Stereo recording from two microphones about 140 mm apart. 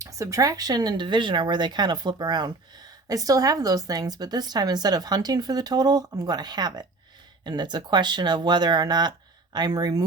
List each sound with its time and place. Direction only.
0.0 s a woman's voice: 25° right (ahead or behind)